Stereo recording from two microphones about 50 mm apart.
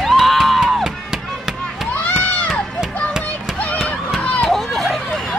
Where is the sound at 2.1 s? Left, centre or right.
Left.